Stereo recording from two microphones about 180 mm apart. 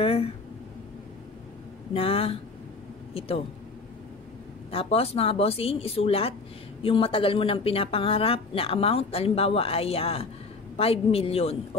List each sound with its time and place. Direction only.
0.0 s a sound: 30° left (ahead or behind)
2.0 s speech: 30° left (ahead or behind)
4.6 s speech: 35° left (ahead or behind)